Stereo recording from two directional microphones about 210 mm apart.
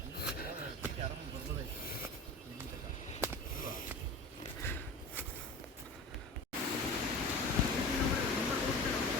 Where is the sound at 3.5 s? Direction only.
40° left (ahead or behind).